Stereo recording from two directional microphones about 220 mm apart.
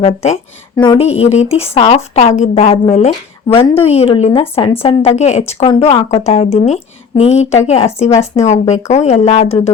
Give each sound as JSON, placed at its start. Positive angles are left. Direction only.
{"t": 0.0, "sound": "a woman's voice", "side_deg": 30}